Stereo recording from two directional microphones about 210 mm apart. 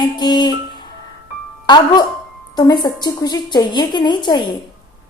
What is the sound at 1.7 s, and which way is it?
A woman's voice, 20° left (ahead or behind).